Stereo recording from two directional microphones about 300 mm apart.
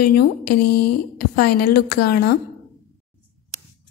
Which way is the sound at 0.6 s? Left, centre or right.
Left.